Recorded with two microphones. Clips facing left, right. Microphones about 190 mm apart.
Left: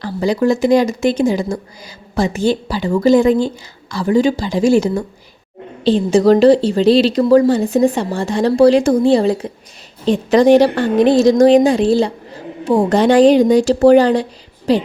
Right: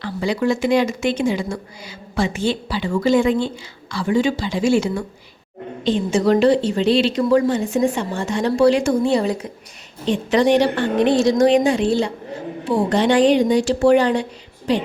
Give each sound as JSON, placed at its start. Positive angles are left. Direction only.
{"t": 0.0, "sound": "a woman's voice", "side_deg": 40}